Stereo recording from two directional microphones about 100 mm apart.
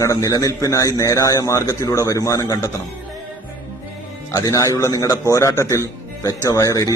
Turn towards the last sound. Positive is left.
turn(degrees=35)  # may be behind; listen again after turning